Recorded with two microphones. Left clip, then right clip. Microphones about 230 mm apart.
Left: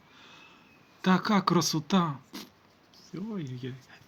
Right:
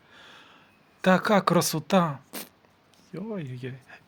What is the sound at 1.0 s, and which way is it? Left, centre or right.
Speech, right.